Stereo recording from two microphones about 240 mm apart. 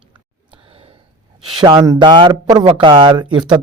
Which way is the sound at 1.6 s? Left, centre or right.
Centre.